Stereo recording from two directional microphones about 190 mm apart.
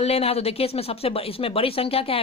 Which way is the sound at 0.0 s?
30° left (ahead or behind).